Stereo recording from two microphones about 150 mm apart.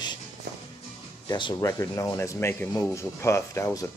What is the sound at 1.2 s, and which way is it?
Speech, 30° left (ahead or behind).